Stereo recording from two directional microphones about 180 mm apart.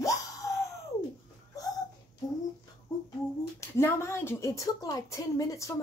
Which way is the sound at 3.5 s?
15° left (ahead or behind).